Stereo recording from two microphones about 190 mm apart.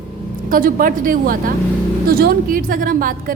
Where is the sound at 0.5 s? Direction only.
45° right (ahead or behind).